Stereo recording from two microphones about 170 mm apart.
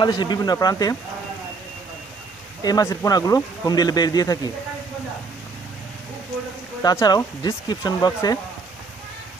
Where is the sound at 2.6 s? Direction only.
20° left (ahead or behind).